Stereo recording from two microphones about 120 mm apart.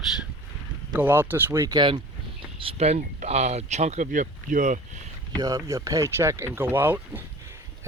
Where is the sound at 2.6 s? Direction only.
55° right (ahead or behind); by 4.8 s 90° right.